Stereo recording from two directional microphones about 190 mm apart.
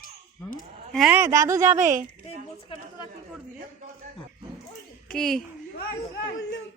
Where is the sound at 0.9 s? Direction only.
5° right (ahead or behind).